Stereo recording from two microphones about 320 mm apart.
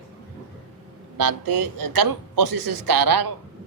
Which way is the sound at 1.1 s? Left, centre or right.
Right.